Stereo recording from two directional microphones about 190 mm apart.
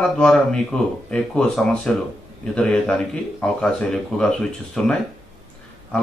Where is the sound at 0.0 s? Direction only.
5° left (ahead or behind).